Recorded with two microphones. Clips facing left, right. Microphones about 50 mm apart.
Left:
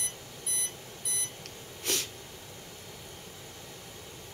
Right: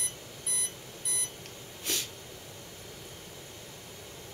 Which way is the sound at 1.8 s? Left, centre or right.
Left.